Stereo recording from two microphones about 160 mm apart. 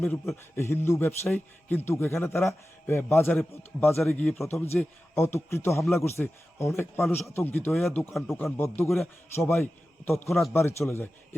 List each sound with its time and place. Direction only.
0.0 s a man's voice: 15° left (ahead or behind)
4.7 s a man's voice: 15° left (ahead or behind)
7.7 s speech: centre (ahead or behind)
8.5 s a man's voice: 15° left (ahead or behind)
10.2 s speech: centre (ahead or behind)
10.5 s a man's voice: 15° left (ahead or behind)